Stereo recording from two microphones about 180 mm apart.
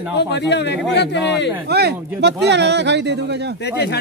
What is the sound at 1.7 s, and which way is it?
Speech, 65° right (ahead or behind).